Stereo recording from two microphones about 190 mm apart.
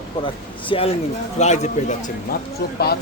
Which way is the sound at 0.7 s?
30° left (ahead or behind).